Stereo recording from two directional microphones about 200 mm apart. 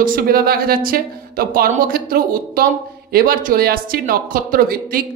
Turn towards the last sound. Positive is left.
turn(degrees=-45)  # may be behind; listen again after turning